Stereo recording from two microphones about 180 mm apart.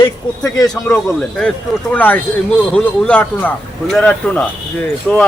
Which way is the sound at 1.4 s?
5° left (ahead or behind).